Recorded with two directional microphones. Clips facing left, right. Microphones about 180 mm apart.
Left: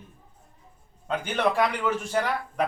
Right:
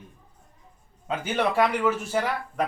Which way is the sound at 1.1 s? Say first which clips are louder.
Even; 5° right (ahead or behind).